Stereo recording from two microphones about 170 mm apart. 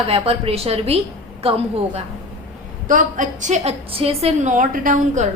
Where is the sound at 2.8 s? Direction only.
50° right (ahead or behind); by 4.3 s 35° right (ahead or behind).